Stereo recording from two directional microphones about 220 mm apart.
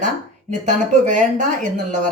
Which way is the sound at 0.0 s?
35° right (ahead or behind).